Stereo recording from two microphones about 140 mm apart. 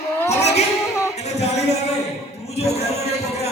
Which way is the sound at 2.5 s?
50° left (ahead or behind).